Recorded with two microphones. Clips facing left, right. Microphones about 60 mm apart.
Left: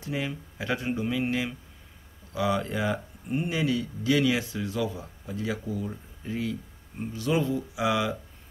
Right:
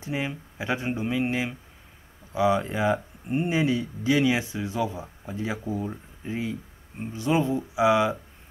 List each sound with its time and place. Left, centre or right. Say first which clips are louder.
0.0 s speech: right 2 dB; right